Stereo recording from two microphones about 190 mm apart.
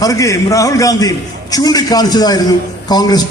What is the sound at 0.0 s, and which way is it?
A man's voice, 15° left (ahead or behind).